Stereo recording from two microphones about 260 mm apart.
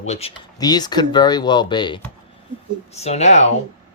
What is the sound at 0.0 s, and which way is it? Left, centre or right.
Speech, left.